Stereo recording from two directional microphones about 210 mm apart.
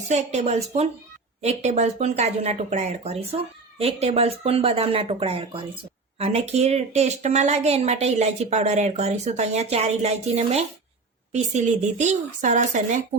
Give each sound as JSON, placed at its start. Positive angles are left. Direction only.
{"t": 0.1, "sound": "a woman's voice", "side_deg": -30}